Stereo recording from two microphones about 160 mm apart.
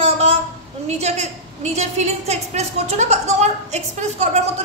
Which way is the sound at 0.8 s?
45° right (ahead or behind).